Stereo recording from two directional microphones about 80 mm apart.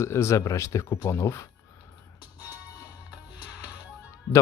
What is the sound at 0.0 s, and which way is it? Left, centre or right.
Speech, left.